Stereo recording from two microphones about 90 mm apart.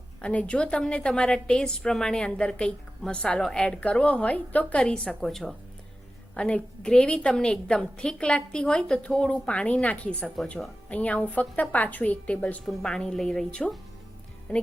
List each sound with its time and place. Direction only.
0.2 s a woman's voice: 10° left (ahead or behind)